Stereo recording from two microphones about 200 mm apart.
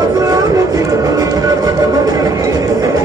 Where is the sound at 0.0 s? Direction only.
15° right (ahead or behind).